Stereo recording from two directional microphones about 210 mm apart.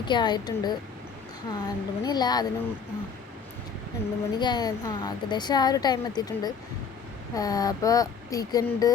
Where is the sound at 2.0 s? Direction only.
20° left (ahead or behind).